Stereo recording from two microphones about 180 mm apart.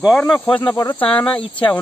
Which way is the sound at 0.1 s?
5° left (ahead or behind).